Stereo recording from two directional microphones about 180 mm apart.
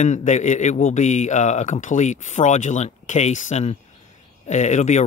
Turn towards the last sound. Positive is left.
turn(degrees=40)  # may be behind; listen again after turning